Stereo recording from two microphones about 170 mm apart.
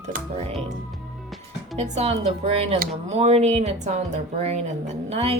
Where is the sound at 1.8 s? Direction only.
40° right (ahead or behind).